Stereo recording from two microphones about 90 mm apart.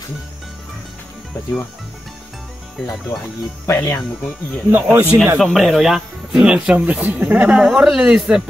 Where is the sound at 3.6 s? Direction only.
30° left (ahead or behind).